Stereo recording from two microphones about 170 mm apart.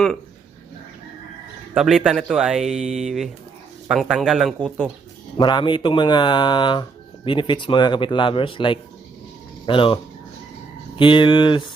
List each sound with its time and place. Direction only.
1.7 s speech: 5° right (ahead or behind)
5.4 s speech: 25° left (ahead or behind)